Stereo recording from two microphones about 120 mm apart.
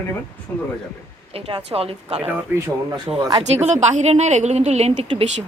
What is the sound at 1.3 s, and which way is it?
Speech, 55° right (ahead or behind).